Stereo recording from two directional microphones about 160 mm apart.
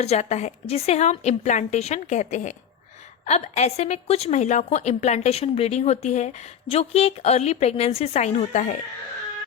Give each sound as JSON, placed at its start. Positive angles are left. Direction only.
{"t": 0.0, "sound": "a woman's voice", "side_deg": 40}